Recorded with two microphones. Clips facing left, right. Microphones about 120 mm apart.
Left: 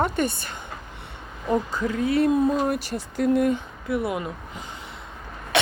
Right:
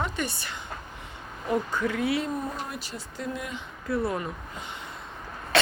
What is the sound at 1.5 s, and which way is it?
Speech, 15° left (ahead or behind).